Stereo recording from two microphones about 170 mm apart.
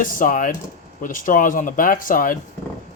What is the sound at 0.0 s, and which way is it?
Speech, 50° left (ahead or behind).